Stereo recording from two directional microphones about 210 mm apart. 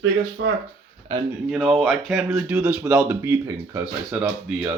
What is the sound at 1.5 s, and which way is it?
Speech, centre (ahead or behind).